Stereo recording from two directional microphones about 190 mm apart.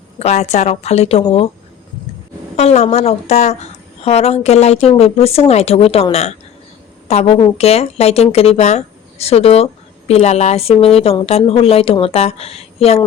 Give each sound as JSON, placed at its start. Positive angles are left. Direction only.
{"t": 0.2, "sound": "a woman's voice", "side_deg": 35}
{"t": 2.6, "sound": "a woman's voice", "side_deg": 35}